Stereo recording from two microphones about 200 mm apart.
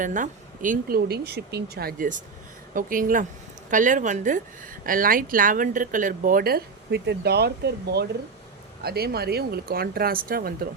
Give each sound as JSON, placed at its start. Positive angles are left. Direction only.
{"t": 0.0, "sound": "a woman's voice", "side_deg": -40}